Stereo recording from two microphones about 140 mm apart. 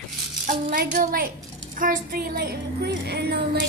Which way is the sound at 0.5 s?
70° right (ahead or behind).